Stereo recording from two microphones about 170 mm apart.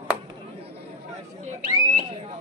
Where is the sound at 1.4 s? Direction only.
45° right (ahead or behind).